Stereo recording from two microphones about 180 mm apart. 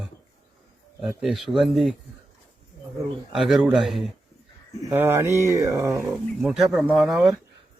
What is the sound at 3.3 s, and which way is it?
Speech, centre (ahead or behind).